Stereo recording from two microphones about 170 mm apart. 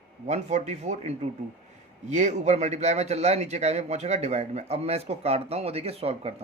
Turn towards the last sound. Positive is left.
turn(degrees=-35)  # may be behind; listen again after turning